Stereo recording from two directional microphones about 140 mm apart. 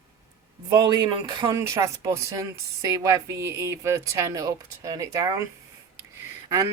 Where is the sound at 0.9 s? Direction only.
30° right (ahead or behind).